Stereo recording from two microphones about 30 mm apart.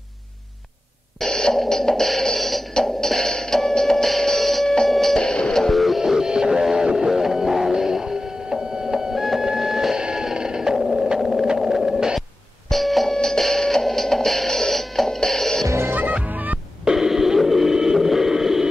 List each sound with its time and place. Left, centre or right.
1.2 s music: centre
5.2 s music: centre
5.6 s music: centre
6.8 s a sound: right
7.1 s music: centre
9.1 s music: centre
9.5 s a sound: centre
10.3 s music: right
11.1 s a sound: centre
12.7 s music: centre
16.0 s music: right
16.9 s a sound: centre